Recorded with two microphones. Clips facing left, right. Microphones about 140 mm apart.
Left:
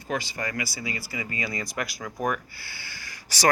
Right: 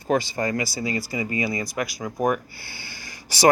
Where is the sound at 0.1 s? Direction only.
25° right (ahead or behind).